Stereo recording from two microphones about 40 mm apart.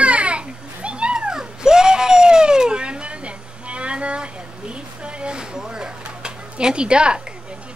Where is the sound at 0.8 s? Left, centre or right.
Right.